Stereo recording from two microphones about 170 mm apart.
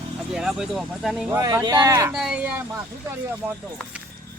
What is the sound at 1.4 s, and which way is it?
Speech, 20° right (ahead or behind).